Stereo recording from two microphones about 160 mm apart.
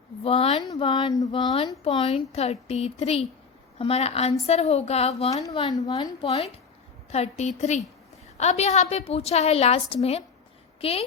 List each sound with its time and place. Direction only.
0.3 s speech: 40° left (ahead or behind)
0.6 s speech: 30° left (ahead or behind)
5.5 s a woman's voice: 25° left (ahead or behind)
6.2 s a woman's voice: 40° left (ahead or behind)